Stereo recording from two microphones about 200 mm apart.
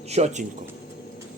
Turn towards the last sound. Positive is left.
turn(degrees=-35)  # may be behind; listen again after turning